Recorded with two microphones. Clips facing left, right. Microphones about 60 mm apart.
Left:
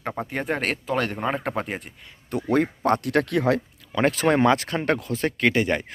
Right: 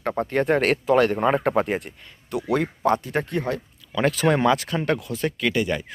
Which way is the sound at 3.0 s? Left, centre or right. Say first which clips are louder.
Left 4 dB; left.